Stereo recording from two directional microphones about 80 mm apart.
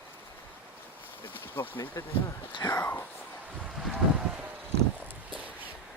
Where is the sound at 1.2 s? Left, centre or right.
Left.